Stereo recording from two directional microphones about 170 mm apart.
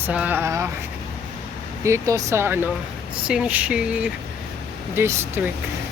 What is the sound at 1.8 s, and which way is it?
Speech, 20° right (ahead or behind).